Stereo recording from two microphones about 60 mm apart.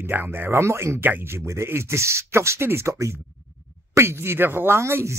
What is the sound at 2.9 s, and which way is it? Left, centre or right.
Speech, right.